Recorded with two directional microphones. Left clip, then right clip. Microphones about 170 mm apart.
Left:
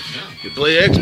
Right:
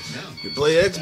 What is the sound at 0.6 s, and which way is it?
Speech, 15° right (ahead or behind).